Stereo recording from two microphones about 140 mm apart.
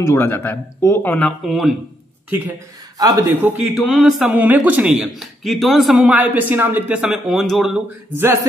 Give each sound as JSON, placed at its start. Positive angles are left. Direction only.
{"t": 0.0, "sound": "speech", "side_deg": 20}
{"t": 1.4, "sound": "a man's voice", "side_deg": 0}
{"t": 3.0, "sound": "speech", "side_deg": -25}
{"t": 3.7, "sound": "a man's voice", "side_deg": 0}
{"t": 8.2, "sound": "a man's voice", "side_deg": -20}